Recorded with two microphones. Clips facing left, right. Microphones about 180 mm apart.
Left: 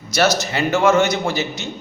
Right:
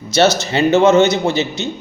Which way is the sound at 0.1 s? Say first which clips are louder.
Right 4 dB; 25° right (ahead or behind).